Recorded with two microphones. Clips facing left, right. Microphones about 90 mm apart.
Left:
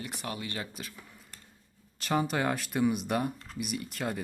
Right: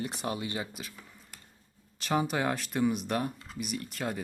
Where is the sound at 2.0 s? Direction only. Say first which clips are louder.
Even; centre (ahead or behind).